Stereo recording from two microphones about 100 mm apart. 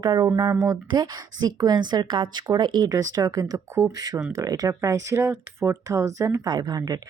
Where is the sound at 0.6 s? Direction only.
45° right (ahead or behind).